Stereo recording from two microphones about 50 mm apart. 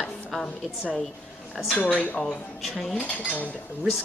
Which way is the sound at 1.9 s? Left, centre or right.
Left.